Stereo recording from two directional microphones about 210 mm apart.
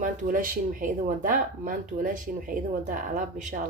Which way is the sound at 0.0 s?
40° right (ahead or behind).